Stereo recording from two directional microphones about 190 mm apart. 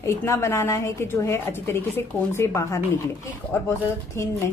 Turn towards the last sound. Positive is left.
turn(degrees=15)  # may be behind; listen again after turning